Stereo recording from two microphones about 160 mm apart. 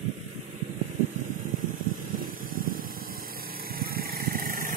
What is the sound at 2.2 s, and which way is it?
Vehicle, 60° right (ahead or behind).